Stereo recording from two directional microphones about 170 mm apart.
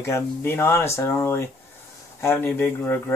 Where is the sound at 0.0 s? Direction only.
15° left (ahead or behind).